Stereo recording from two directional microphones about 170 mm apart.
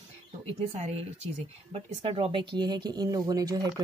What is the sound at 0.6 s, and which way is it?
A woman's voice, 40° right (ahead or behind).